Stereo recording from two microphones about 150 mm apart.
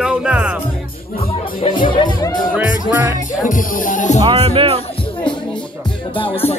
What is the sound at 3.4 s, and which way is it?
Speech, 60° left (ahead or behind).